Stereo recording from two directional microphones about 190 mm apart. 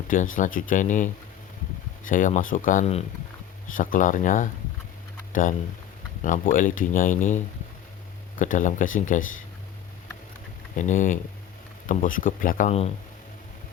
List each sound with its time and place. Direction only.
0.1 s speech: 45° left (ahead or behind)
10.8 s speech: 40° left (ahead or behind)